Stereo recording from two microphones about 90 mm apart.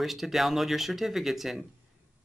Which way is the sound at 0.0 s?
Centre (ahead or behind).